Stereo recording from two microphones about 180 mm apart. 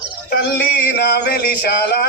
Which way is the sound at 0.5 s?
65° left (ahead or behind).